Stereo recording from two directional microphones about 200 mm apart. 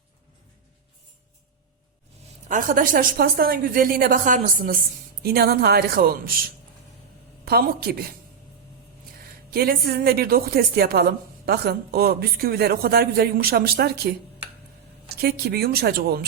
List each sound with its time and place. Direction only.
2.5 s a woman's voice: 40° right (ahead or behind)
7.4 s a woman's voice: 50° right (ahead or behind)
9.5 s a woman's voice: 50° right (ahead or behind)
15.1 s a woman's voice: 50° right (ahead or behind)